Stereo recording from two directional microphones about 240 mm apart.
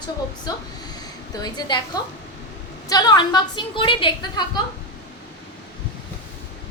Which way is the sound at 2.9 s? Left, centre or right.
Centre.